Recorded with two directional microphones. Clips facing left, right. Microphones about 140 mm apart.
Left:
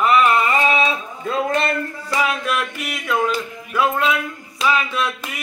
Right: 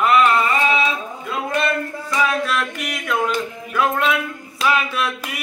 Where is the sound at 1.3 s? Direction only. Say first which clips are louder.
Left 1 dB; 30° left (ahead or behind).